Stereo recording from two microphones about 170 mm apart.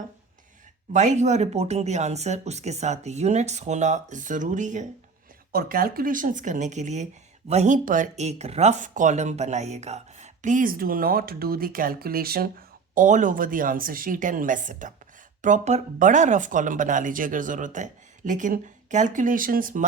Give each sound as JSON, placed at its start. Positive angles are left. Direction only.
{"t": 0.9, "sound": "speech", "side_deg": -45}
{"t": 5.5, "sound": "speech", "side_deg": -60}